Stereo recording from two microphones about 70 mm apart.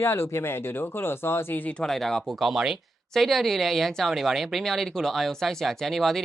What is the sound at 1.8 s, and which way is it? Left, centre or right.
Speech, centre.